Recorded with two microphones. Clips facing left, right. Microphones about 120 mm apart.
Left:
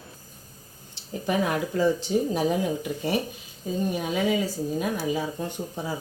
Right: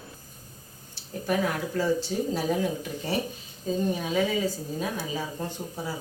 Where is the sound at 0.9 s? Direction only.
15° left (ahead or behind).